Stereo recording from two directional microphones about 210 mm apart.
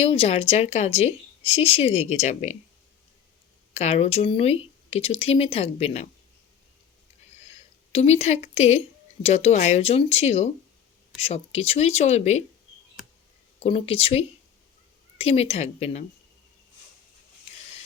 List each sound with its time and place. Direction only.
0.0 s a woman's voice: 30° left (ahead or behind)
3.8 s a woman's voice: 30° left (ahead or behind)
7.9 s speech: 30° left (ahead or behind)
13.6 s a woman's voice: 25° left (ahead or behind)